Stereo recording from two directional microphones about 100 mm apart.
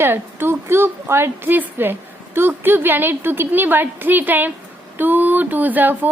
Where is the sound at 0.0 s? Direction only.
20° right (ahead or behind).